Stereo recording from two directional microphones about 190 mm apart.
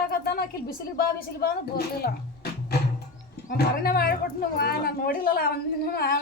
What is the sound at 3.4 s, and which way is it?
A woman's voice, 50° left (ahead or behind).